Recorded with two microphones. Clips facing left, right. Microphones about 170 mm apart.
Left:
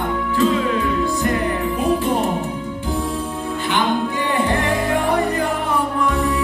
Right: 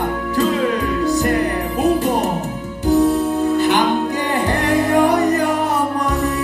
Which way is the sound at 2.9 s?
40° right (ahead or behind).